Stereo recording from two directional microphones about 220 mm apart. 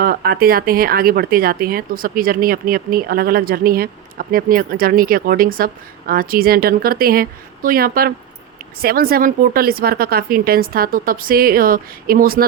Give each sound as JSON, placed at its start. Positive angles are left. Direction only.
{"t": 0.0, "sound": "speech", "side_deg": -45}